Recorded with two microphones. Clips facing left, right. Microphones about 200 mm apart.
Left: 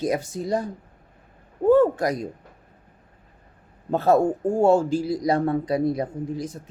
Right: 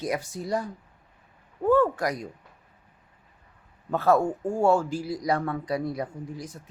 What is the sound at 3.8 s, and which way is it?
Speech, 25° left (ahead or behind).